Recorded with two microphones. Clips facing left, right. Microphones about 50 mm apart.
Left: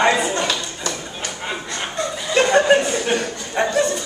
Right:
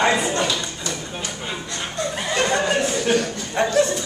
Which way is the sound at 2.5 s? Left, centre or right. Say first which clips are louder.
Left 9 dB; left.